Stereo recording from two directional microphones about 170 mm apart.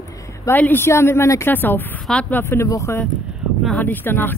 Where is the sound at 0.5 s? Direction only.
10° left (ahead or behind).